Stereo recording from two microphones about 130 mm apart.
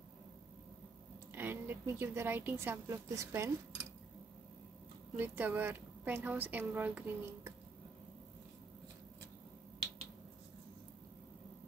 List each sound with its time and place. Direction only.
1.3 s a woman's voice: 15° right (ahead or behind)
5.1 s a woman's voice: 15° right (ahead or behind)